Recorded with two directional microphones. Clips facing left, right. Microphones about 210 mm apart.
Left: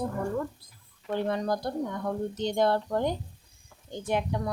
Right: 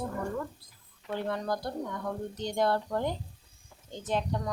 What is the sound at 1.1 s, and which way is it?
A woman's voice, 20° left (ahead or behind).